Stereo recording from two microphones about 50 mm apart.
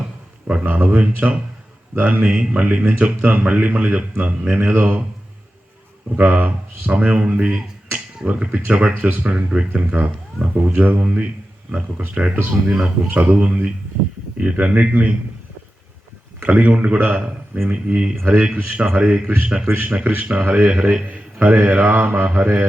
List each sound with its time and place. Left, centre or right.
0.6 s speech: right
4.6 s speech: right
6.1 s speech: right
9.3 s speech: right
16.4 s speech: right
17.7 s speech: right